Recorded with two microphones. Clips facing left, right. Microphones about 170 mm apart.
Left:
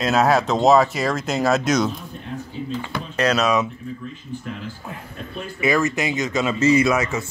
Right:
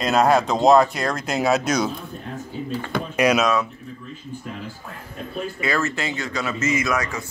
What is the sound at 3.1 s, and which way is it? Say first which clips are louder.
Speech: right 1 dB; 10° right (ahead or behind).